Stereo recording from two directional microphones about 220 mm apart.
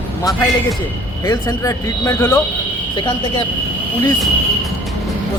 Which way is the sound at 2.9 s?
20° left (ahead or behind).